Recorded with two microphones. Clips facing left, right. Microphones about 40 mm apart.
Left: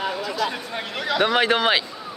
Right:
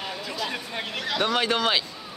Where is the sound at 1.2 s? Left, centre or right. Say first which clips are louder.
Left 5 dB; centre.